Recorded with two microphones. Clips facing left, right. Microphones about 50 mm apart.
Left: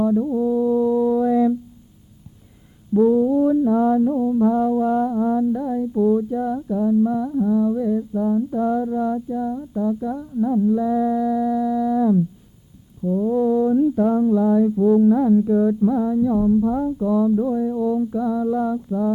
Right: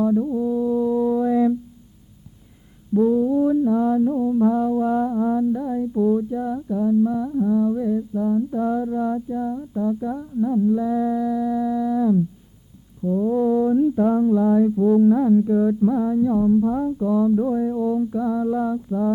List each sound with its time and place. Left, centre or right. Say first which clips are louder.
0.0 s music: left 1 dB; centre
0.3 s music: left 2 dB; centre
0.5 s brass instrument: left 3 dB; centre
2.9 s mantra: left 2 dB; centre
10.4 s mantra: left 1 dB; centre